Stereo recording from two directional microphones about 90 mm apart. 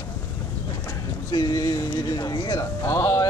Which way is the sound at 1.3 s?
50° left (ahead or behind).